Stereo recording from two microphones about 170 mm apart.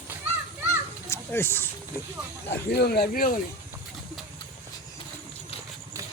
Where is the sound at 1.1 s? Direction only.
15° left (ahead or behind).